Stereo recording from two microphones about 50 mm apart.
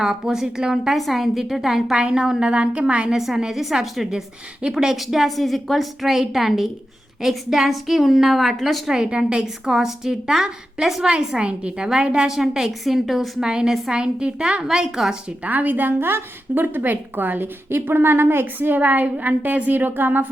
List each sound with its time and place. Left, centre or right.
0.0 s a woman's voice: centre
2.0 s a woman's voice: centre
3.2 s a woman's voice: centre
8.9 s a woman's voice: centre
13.4 s a woman's voice: centre
15.4 s a woman's voice: right
18.8 s a woman's voice: right